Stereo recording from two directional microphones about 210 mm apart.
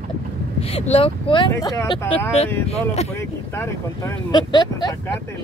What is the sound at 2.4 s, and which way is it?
Speech, 30° left (ahead or behind).